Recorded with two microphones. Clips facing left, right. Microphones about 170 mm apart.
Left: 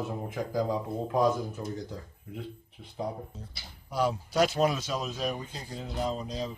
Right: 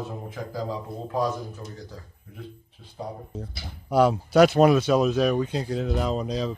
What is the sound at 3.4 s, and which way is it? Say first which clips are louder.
Speech: right 9 dB; 65° right (ahead or behind).